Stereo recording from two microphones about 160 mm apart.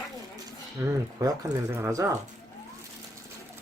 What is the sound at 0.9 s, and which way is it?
Speech, 20° right (ahead or behind).